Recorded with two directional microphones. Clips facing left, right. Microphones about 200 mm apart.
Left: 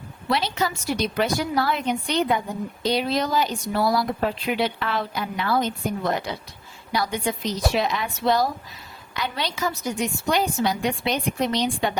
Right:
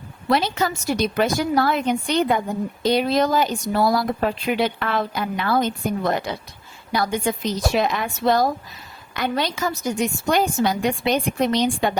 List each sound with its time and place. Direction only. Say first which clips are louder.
0.3 s speech: right 4 dB; 45° right (ahead or behind)